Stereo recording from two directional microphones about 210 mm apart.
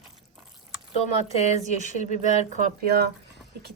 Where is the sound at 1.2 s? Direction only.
30° left (ahead or behind).